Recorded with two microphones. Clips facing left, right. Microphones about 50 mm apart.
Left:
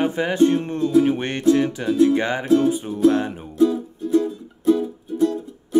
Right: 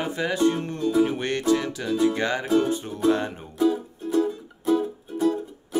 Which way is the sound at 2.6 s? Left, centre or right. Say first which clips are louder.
Left 5 dB; centre.